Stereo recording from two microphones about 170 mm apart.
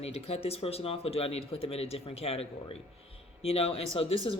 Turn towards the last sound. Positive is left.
turn(degrees=30)  # may be behind; listen again after turning